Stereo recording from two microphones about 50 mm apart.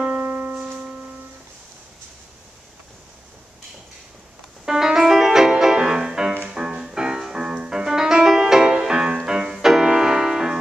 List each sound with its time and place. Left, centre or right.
0.0 s piano: centre
4.6 s music: centre